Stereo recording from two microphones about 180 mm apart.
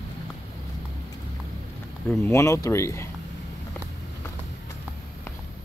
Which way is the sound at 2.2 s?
15° left (ahead or behind).